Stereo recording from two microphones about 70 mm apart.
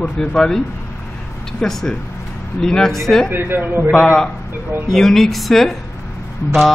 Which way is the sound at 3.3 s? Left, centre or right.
Right.